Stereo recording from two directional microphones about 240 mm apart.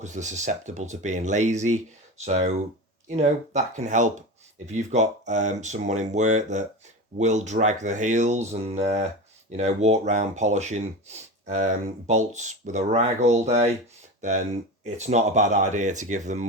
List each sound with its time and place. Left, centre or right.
0.0 s speech: right